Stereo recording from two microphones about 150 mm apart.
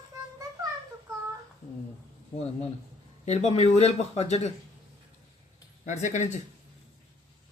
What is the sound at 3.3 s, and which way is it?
Speech, 45° left (ahead or behind).